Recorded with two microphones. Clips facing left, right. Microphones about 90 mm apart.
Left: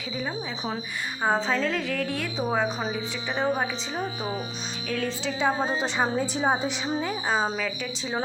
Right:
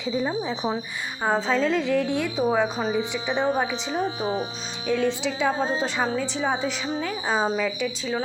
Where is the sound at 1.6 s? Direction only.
20° right (ahead or behind).